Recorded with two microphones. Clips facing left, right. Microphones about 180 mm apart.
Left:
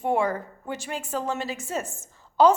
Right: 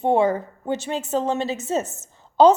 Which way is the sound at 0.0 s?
25° right (ahead or behind).